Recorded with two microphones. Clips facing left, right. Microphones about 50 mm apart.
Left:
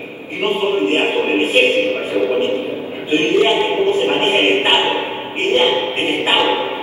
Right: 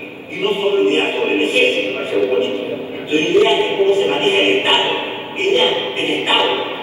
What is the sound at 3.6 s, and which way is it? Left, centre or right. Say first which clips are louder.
Speech: right 1 dB; left.